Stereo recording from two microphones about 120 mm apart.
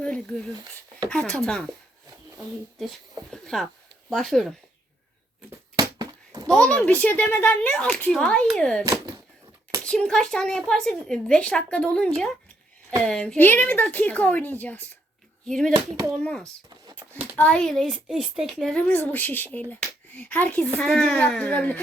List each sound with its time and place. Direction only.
0.0 s speech: 10° left (ahead or behind)
3.3 s speech: 5° left (ahead or behind)
5.7 s bouncing: 35° right (ahead or behind)
6.5 s speech: 5° left (ahead or behind)
8.8 s a sound: 30° right (ahead or behind)
9.8 s speech: 5° left (ahead or behind)
18.8 s speech: 15° left (ahead or behind)